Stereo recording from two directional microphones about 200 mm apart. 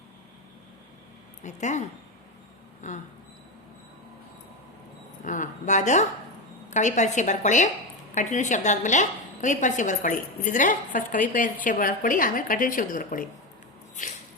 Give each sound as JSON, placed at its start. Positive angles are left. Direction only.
{"t": 1.5, "sound": "a woman's voice", "side_deg": 35}
{"t": 2.8, "sound": "a woman's voice", "side_deg": 35}
{"t": 5.2, "sound": "a woman's voice", "side_deg": 40}